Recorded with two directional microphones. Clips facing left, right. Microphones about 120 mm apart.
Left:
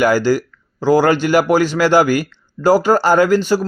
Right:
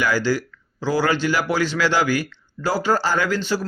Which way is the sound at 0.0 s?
45° left (ahead or behind).